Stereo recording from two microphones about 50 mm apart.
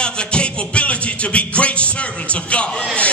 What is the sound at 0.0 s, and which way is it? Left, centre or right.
Music, left.